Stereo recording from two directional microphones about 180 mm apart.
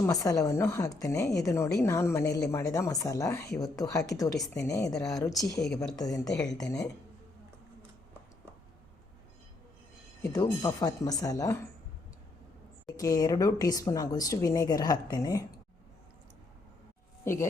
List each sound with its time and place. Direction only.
0.0 s a woman's voice: 20° left (ahead or behind)
2.2 s speech: 65° left (ahead or behind)
2.5 s a woman's voice: 15° left (ahead or behind)
6.2 s speech: 5° left (ahead or behind)
10.3 s speech: 20° left (ahead or behind)
12.8 s speech: 20° left (ahead or behind)